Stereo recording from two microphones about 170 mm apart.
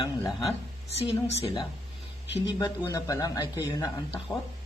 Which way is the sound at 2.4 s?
20° left (ahead or behind).